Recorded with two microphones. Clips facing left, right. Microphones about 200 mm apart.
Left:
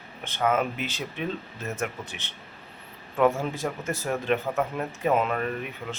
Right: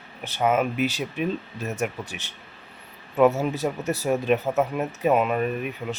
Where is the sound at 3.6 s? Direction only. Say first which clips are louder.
Right 5 dB; 20° right (ahead or behind).